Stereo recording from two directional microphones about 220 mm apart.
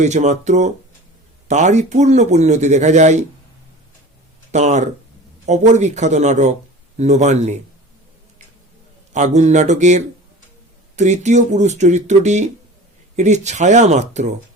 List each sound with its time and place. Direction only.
0.0 s speech: 30° right (ahead or behind)
4.5 s speech: 30° right (ahead or behind)
9.1 s speech: 30° right (ahead or behind)